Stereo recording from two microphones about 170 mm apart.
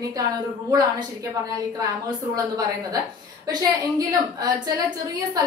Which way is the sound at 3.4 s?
20° right (ahead or behind).